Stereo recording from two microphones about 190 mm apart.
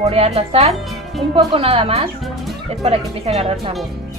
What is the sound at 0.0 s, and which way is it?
Speech, 35° right (ahead or behind).